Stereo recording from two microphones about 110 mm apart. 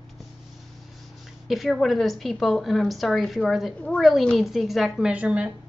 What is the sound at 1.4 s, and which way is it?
A woman's voice, centre (ahead or behind).